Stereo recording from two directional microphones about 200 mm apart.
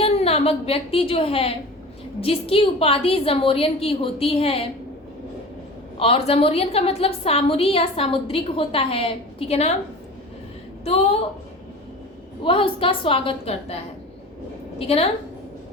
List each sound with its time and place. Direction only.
0.0 s a woman's voice: 30° left (ahead or behind)
6.0 s a woman's voice: 30° left (ahead or behind)
10.8 s speech: 30° left (ahead or behind)
12.4 s a woman's voice: 25° left (ahead or behind)